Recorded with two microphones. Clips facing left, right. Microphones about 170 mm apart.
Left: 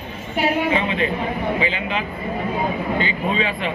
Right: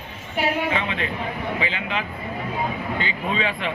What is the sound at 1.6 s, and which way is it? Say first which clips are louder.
A man's voice: left 4 dB; 10° left (ahead or behind).